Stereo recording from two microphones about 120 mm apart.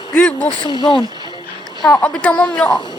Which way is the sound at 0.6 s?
40° left (ahead or behind).